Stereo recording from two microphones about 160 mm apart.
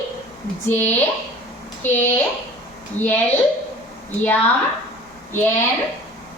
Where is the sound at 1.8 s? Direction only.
10° left (ahead or behind).